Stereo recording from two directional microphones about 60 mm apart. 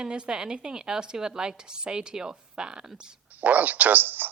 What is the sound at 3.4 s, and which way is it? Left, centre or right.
Speech, right.